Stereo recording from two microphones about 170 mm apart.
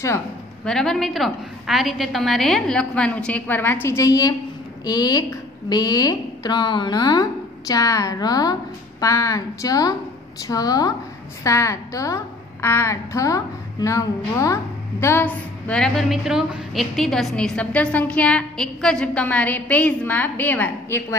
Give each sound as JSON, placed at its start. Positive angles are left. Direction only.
{"t": 0.7, "sound": "a woman's voice", "side_deg": 0}